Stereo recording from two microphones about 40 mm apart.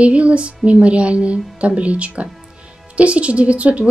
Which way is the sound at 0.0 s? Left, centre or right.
Right.